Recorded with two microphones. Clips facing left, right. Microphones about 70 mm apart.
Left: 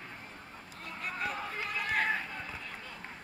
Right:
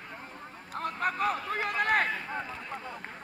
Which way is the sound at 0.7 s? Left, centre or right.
Right.